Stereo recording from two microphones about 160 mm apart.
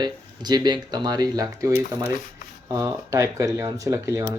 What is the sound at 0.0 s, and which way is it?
Speech, 25° right (ahead or behind).